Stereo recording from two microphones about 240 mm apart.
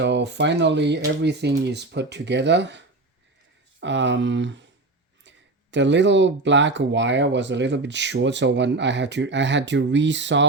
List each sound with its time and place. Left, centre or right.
0.0 s speech: right
5.7 s speech: right